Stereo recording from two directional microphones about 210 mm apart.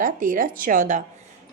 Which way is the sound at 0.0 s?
40° right (ahead or behind).